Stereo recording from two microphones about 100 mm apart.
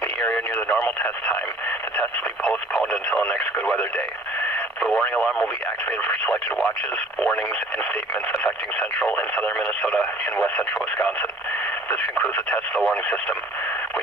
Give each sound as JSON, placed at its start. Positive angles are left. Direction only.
{"t": 0.2, "sound": "speech", "side_deg": 15}